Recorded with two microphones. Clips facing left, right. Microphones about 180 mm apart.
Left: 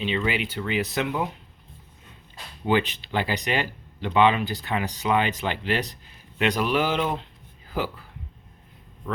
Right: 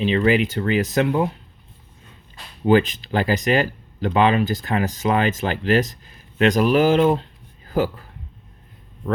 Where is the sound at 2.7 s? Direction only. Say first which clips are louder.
Right 6 dB; 45° right (ahead or behind).